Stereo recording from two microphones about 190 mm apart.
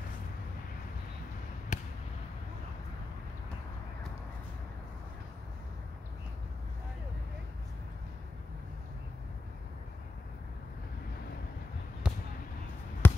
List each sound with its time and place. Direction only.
1.7 s a sound: 40° left (ahead or behind)
12.1 s basketball bounce: 5° right (ahead or behind)
13.0 s basketball bounce: 10° left (ahead or behind)